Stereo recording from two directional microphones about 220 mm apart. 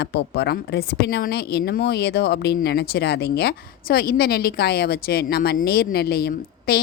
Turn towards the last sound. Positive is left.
turn(degrees=45)  # may be behind; listen again after turning